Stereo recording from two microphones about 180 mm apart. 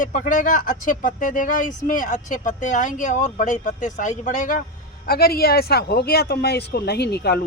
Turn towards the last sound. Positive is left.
turn(degrees=65)  # may be behind; listen again after turning